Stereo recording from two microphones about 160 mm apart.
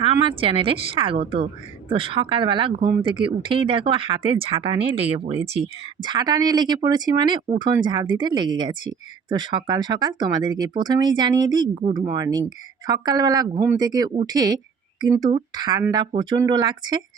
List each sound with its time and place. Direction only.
0.0 s speech: 35° right (ahead or behind)
11.7 s speech: 40° right (ahead or behind)
11.9 s speech: 25° right (ahead or behind)